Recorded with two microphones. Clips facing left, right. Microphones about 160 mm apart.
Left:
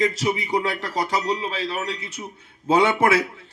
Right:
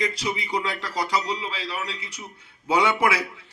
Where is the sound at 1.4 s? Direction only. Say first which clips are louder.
Left 4 dB; 20° left (ahead or behind).